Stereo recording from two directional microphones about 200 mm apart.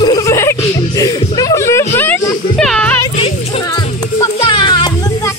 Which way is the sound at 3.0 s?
20° left (ahead or behind).